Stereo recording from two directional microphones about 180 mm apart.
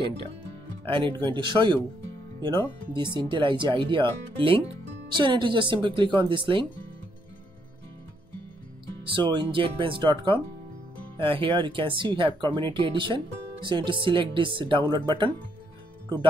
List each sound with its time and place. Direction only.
0.8 s speech: 30° right (ahead or behind)
5.1 s speech: 25° right (ahead or behind)
9.0 s speech: 25° right (ahead or behind)